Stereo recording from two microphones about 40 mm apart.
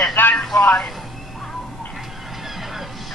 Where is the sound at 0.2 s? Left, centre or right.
Left.